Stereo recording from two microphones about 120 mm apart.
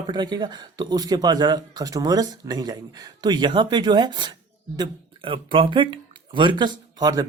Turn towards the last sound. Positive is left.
turn(degrees=-30)  # may be behind; listen again after turning